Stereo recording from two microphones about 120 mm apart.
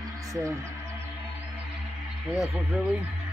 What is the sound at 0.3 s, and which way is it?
Speech, 25° right (ahead or behind).